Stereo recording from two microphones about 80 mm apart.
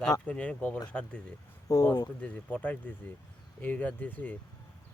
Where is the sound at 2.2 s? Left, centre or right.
Centre.